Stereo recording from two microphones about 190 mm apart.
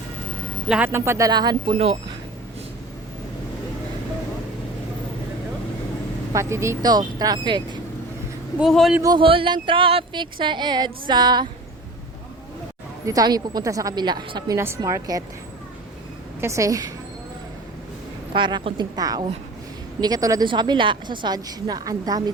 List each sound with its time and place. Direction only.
0.7 s speech: 10° right (ahead or behind); by 2.0 s 25° right (ahead or behind)
6.3 s speech: 15° right (ahead or behind)
8.5 s a man's voice: centre (ahead or behind)
9.0 s speech: 20° right (ahead or behind)
13.1 s speech: 20° right (ahead or behind)
16.4 s speech: 15° right (ahead or behind)
18.3 s speech: 25° right (ahead or behind)